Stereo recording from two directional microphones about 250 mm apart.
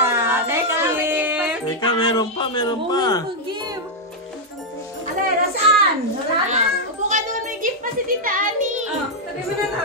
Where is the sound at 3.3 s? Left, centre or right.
Centre.